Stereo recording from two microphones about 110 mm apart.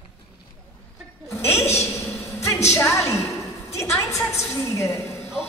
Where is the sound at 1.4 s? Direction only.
25° left (ahead or behind).